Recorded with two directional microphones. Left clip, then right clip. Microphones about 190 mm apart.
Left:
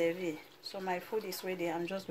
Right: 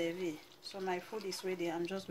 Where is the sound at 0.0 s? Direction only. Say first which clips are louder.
Left 5 dB; 45° left (ahead or behind).